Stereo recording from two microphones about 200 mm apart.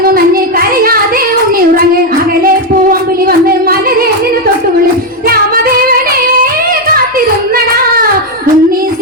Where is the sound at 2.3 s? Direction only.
45° right (ahead or behind).